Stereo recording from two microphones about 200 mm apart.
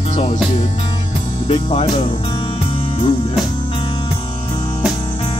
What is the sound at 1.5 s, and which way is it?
Music, 30° left (ahead or behind).